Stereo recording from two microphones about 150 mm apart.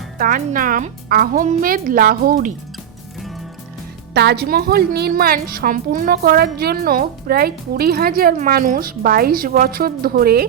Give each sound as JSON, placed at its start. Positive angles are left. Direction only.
{"t": 0.2, "sound": "speech", "side_deg": -65}
{"t": 4.1, "sound": "a woman's voice", "side_deg": -90}
{"t": 8.4, "sound": "speech", "side_deg": -70}